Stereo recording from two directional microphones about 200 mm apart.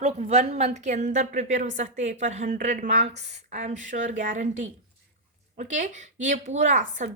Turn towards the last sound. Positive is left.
turn(degrees=-40)  # may be behind; listen again after turning